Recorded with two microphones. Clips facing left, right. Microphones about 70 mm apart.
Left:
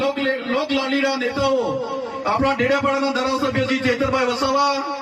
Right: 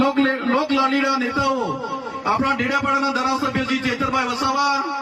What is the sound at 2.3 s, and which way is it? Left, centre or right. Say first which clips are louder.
A man's voice: left 3 dB; centre.